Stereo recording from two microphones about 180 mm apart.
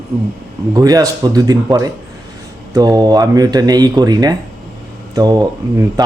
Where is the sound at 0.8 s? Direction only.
20° right (ahead or behind).